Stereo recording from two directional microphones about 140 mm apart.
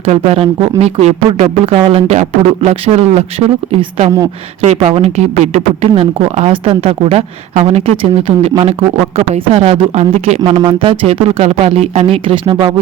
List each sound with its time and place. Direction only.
0.0 s speech: 45° right (ahead or behind)
10.6 s speech: 35° right (ahead or behind)